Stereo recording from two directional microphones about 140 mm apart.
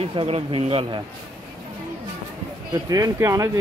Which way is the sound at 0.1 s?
40° right (ahead or behind).